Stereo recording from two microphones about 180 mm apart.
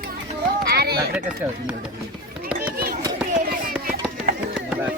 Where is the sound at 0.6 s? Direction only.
60° right (ahead or behind).